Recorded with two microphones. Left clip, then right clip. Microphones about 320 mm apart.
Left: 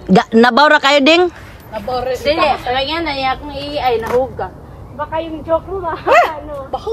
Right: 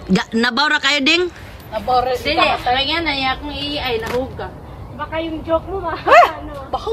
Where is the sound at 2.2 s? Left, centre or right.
Centre.